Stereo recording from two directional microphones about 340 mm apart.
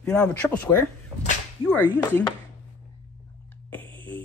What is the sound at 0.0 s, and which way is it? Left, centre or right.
Speech, centre.